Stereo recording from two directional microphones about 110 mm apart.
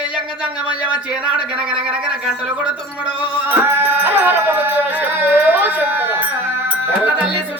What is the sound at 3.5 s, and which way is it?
Music, 20° right (ahead or behind).